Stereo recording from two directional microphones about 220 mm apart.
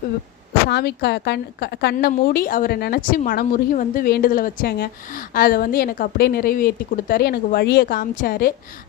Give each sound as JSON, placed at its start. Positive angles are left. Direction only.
{"t": 0.7, "sound": "a woman's voice", "side_deg": 45}